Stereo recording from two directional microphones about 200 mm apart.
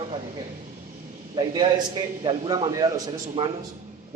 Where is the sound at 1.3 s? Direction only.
25° right (ahead or behind).